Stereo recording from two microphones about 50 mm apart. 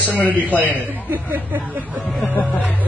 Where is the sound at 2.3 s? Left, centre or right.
Left.